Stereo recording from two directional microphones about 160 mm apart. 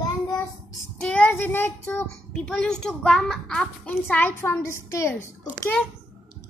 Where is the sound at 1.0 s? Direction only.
10° left (ahead or behind).